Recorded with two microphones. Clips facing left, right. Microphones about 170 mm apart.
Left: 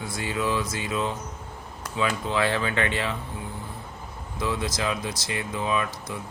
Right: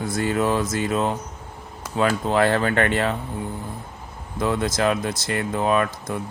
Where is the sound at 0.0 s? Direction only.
50° right (ahead or behind).